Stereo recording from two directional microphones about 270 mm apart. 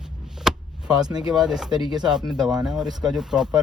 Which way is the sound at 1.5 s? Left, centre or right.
Centre.